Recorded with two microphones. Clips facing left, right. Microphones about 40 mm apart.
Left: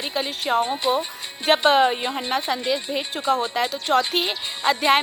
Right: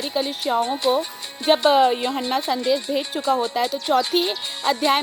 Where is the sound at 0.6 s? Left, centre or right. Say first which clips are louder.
Right 2 dB; left.